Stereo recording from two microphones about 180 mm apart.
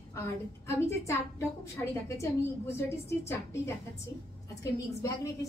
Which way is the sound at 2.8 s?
15° left (ahead or behind).